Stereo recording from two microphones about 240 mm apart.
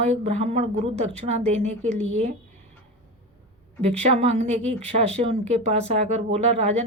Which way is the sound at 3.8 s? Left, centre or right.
Right.